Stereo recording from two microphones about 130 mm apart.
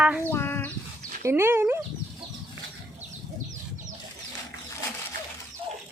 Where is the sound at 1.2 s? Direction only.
20° right (ahead or behind).